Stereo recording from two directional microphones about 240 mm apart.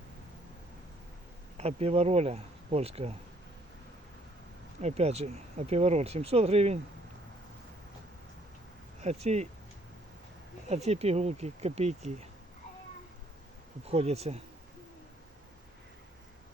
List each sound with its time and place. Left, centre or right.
1.5 s speech: right
4.8 s speech: right
9.0 s speech: right
10.8 s speech: right
13.8 s speech: right